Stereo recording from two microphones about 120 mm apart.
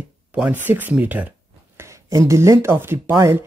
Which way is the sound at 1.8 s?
25° right (ahead or behind).